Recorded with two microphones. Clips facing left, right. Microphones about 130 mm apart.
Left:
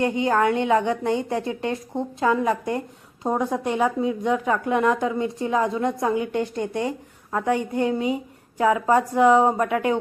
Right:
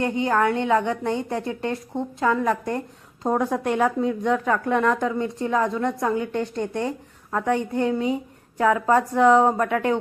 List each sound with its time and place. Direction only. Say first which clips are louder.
0.0 s a woman's voice: left 1 dB; 20° left (ahead or behind)
3.2 s speech: right 1 dB; centre (ahead or behind)
4.4 s a woman's voice: left 1 dB; 20° left (ahead or behind)